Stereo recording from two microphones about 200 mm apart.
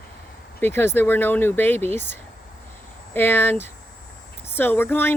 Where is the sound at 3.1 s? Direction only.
10° left (ahead or behind).